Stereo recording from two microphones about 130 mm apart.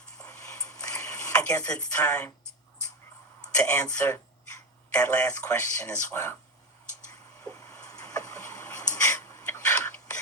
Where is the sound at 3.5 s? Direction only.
10° left (ahead or behind).